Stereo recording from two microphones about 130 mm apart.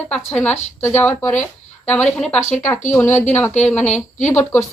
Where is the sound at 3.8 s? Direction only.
65° left (ahead or behind).